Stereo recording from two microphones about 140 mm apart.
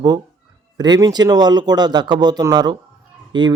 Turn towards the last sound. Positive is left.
turn(degrees=-35)  # may be behind; listen again after turning